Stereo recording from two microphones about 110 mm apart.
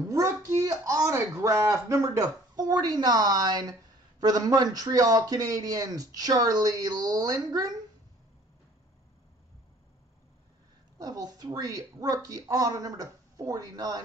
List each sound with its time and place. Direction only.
0.1 s a man's voice: 30° right (ahead or behind)
11.0 s a man's voice: 35° right (ahead or behind)